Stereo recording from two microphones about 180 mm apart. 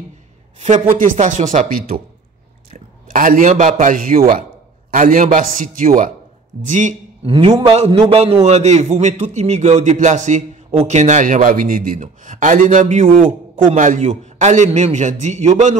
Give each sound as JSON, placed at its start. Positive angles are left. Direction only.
{"t": 0.6, "sound": "a man's voice", "side_deg": -40}